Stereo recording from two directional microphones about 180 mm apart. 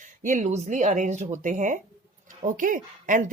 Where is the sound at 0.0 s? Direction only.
45° right (ahead or behind).